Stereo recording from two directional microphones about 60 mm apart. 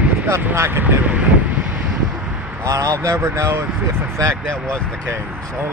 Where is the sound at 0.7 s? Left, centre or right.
Right.